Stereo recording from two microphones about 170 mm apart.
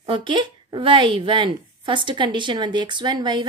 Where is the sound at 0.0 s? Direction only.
30° right (ahead or behind).